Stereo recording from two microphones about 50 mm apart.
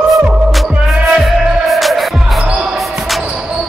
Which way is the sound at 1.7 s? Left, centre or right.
Centre.